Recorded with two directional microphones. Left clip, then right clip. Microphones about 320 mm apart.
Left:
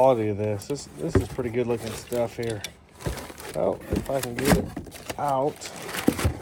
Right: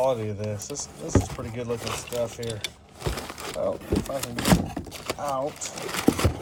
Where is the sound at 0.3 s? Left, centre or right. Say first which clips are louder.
Left 5 dB; left.